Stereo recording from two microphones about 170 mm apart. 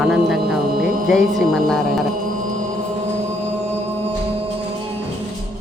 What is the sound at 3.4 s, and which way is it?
Music, 40° right (ahead or behind).